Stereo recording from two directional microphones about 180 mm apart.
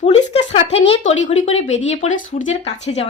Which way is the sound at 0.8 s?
35° left (ahead or behind).